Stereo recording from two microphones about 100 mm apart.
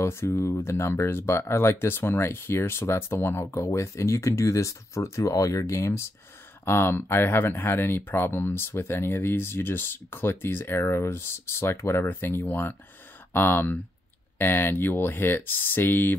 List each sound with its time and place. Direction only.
0.0 s speech: 25° left (ahead or behind)